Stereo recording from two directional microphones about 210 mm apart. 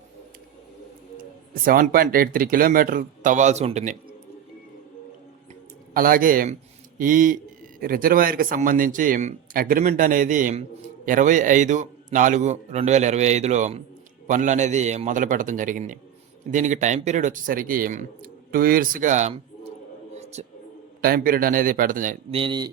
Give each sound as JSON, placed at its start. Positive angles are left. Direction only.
{"t": 1.6, "sound": "speech", "side_deg": -45}
{"t": 5.9, "sound": "speech", "side_deg": -40}
{"t": 20.1, "sound": "a sound", "side_deg": -30}
{"t": 21.0, "sound": "speech", "side_deg": -45}
{"t": 22.3, "sound": "speech", "side_deg": -25}